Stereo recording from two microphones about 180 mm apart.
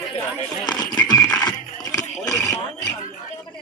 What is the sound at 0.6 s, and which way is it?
Music, 25° left (ahead or behind).